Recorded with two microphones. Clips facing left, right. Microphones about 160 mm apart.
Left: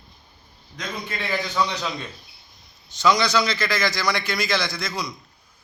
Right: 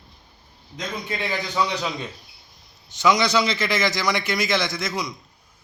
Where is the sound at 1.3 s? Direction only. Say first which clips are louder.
Left 1 dB; 10° right (ahead or behind).